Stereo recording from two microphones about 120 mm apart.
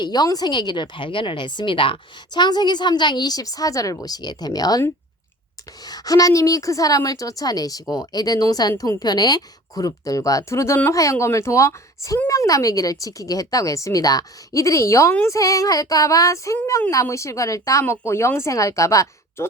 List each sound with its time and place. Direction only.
0.0 s a woman's voice: 35° left (ahead or behind)
5.8 s a woman's voice: 30° left (ahead or behind)